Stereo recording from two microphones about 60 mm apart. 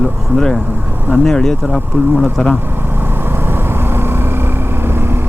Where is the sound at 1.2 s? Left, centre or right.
Centre.